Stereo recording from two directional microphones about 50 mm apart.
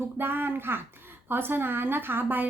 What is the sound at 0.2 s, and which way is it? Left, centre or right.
Speech, right.